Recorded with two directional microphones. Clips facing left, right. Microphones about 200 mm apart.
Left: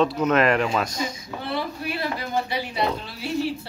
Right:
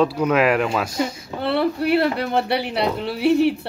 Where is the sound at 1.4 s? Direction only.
65° right (ahead or behind).